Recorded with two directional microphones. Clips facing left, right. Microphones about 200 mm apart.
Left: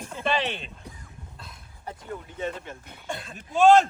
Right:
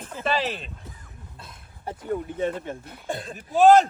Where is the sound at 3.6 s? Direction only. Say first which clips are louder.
Right 2 dB; centre (ahead or behind).